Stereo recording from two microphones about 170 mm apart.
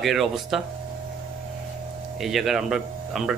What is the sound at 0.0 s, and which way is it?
Speech, centre (ahead or behind).